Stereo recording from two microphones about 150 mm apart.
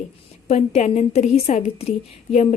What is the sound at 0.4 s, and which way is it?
A woman's voice, 45° left (ahead or behind).